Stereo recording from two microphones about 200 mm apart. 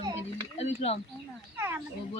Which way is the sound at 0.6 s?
30° left (ahead or behind).